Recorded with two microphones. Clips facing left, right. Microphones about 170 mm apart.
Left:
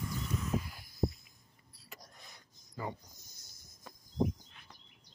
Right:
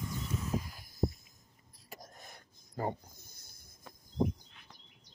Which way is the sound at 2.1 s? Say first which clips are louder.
Right 4 dB; 50° right (ahead or behind).